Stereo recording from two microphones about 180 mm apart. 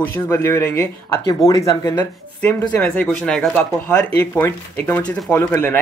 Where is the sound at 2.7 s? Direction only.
5° left (ahead or behind).